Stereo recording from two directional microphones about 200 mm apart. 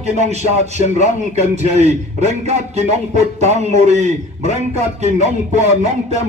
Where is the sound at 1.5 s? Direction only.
35° right (ahead or behind).